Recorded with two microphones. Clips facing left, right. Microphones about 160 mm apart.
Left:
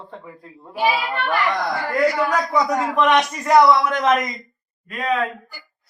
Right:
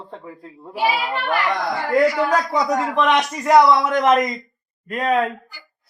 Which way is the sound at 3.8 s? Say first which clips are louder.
Right 2 dB; 20° right (ahead or behind).